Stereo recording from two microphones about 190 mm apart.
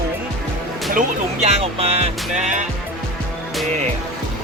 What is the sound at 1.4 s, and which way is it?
Speech, 30° right (ahead or behind).